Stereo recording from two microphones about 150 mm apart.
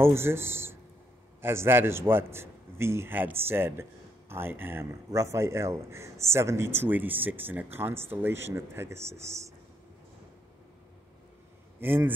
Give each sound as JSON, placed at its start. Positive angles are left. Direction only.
{"t": 0.0, "sound": "speech", "side_deg": -15}
{"t": 11.8, "sound": "speech", "side_deg": -15}